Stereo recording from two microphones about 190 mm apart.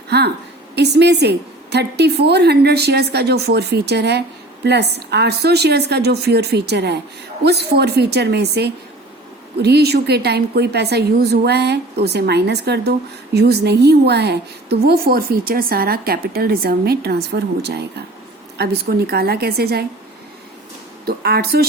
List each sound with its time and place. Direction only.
0.8 s a woman's voice: 60° right (ahead or behind)
21.0 s a woman's voice: 55° right (ahead or behind)